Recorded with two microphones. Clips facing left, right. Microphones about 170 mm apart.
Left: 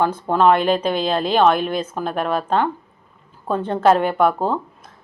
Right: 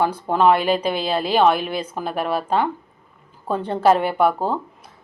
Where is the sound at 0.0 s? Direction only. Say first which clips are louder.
Left 1 dB; 10° right (ahead or behind).